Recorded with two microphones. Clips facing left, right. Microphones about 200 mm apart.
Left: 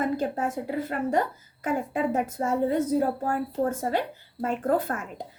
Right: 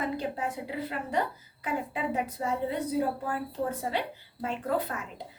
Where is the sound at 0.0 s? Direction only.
45° left (ahead or behind).